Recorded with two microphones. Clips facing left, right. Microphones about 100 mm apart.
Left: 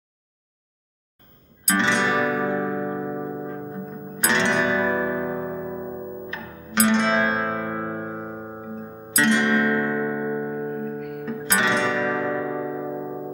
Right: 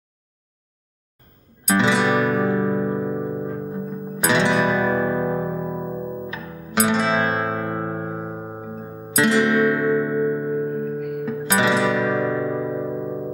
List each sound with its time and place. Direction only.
1.7 s music: 5° right (ahead or behind)
6.3 s music: 5° right (ahead or behind)